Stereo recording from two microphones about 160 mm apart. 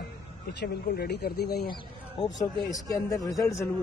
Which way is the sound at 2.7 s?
20° left (ahead or behind).